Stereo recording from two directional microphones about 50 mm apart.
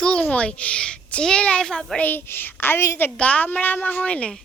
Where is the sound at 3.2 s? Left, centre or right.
Left.